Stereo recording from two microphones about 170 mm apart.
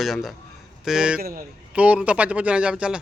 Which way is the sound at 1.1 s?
60° right (ahead or behind).